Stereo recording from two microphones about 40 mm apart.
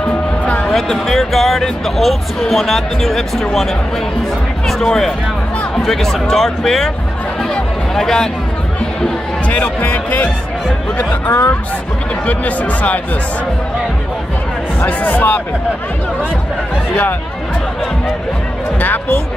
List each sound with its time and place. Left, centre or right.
0.7 s speech: centre
4.6 s speech: centre
7.5 s music: centre
9.5 s speech: left
12.3 s speech: left
14.9 s speech: left
18.8 s speech: left